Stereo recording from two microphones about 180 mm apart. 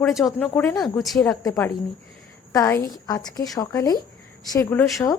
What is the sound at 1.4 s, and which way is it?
A woman's voice, 20° left (ahead or behind).